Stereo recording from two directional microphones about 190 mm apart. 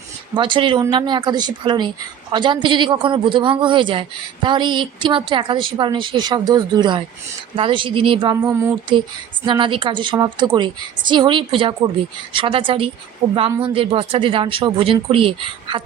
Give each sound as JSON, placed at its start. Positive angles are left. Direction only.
{"t": 0.3, "sound": "a woman's voice", "side_deg": -25}